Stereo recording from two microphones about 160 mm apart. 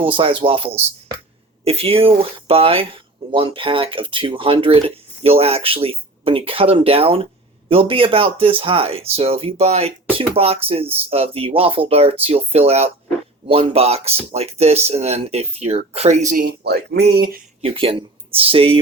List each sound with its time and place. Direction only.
0.0 s speech: 35° right (ahead or behind)
16.4 s speech: 85° right
17.6 s speech: 35° right (ahead or behind)